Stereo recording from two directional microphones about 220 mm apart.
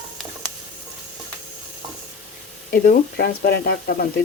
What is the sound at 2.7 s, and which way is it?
Speech, 45° left (ahead or behind).